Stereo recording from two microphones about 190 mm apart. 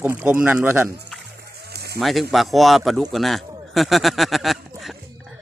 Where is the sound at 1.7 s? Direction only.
60° right (ahead or behind).